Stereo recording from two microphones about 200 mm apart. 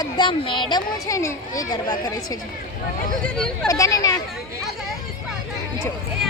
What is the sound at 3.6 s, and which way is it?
Speech, 15° left (ahead or behind).